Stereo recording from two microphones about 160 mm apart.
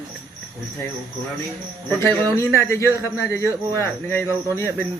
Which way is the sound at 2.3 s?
15° left (ahead or behind).